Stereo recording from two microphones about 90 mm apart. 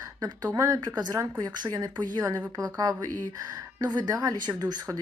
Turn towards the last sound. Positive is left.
turn(degrees=-45)  # may be behind; listen again after turning